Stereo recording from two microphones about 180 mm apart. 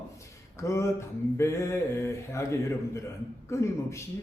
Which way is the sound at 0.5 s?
15° left (ahead or behind).